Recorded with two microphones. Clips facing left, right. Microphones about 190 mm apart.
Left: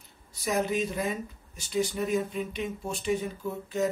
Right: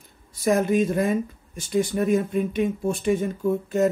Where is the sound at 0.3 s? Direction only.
50° right (ahead or behind).